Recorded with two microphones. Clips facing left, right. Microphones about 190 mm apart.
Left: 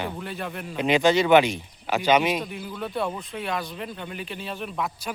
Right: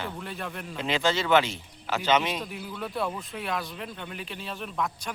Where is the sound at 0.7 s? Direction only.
15° left (ahead or behind).